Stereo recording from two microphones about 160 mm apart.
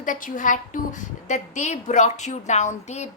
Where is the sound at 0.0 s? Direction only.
55° left (ahead or behind).